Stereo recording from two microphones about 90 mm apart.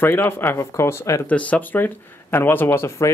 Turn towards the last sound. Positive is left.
turn(degrees=30)  # may be behind; listen again after turning